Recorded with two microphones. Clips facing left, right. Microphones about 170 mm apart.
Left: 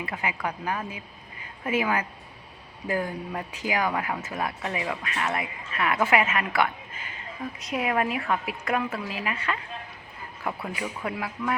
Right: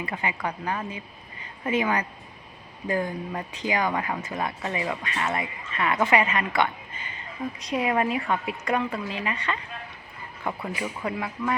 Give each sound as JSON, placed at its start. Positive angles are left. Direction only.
{"t": 0.0, "sound": "speech", "side_deg": 5}